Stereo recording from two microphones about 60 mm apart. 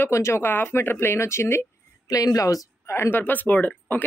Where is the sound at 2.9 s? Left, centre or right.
Left.